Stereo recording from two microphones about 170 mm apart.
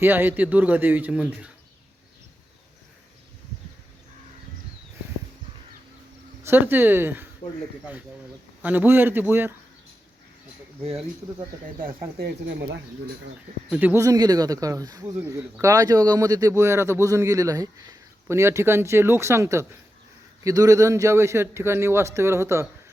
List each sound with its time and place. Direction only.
0.0 s a man's voice: 10° right (ahead or behind)
6.4 s a man's voice: 10° right (ahead or behind)
8.6 s a man's voice: 10° right (ahead or behind)
11.8 s speech: 55° right (ahead or behind)
12.1 s speech: 75° right (ahead or behind); by 12.8 s 90° right
13.7 s a man's voice: 10° right (ahead or behind)